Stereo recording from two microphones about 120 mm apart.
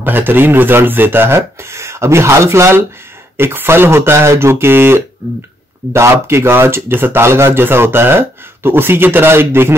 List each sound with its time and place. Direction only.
0.0 s speech: 15° right (ahead or behind)